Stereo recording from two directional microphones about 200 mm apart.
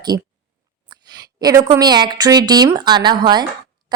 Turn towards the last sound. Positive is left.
turn(degrees=-20)  # may be behind; listen again after turning